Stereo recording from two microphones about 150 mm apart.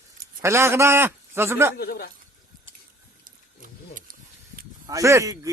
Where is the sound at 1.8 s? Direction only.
90° left.